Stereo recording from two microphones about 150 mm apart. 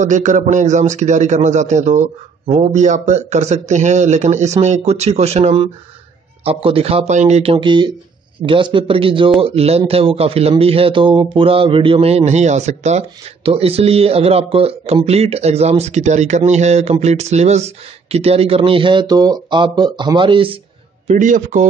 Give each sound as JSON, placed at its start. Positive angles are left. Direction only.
{"t": 0.0, "sound": "speech", "side_deg": -55}
{"t": 21.1, "sound": "a man's voice", "side_deg": -55}